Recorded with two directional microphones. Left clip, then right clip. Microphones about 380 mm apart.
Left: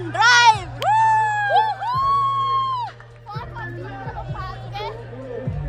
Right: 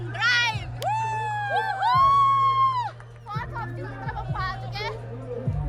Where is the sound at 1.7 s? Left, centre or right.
Centre.